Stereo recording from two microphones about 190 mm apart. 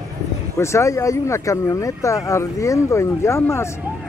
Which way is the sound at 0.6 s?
15° left (ahead or behind).